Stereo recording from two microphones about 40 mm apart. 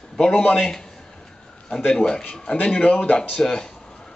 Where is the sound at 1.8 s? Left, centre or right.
Centre.